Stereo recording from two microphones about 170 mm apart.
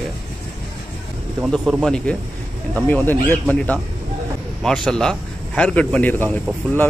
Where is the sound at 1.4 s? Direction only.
Centre (ahead or behind).